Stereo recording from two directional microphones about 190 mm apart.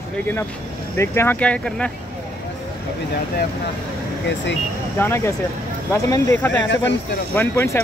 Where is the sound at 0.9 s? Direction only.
15° left (ahead or behind).